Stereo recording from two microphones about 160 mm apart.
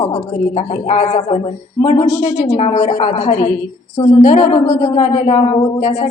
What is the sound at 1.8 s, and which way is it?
Speech, 20° left (ahead or behind).